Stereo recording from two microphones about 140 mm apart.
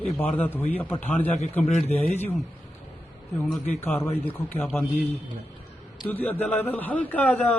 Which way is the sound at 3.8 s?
15° left (ahead or behind).